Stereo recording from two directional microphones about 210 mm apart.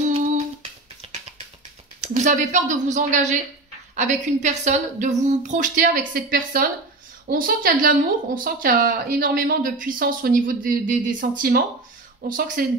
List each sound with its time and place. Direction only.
1.0 s music: 30° right (ahead or behind)
2.0 s a woman's voice: 35° right (ahead or behind)